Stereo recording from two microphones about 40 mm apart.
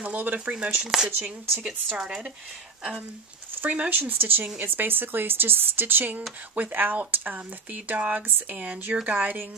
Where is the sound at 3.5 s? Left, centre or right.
Right.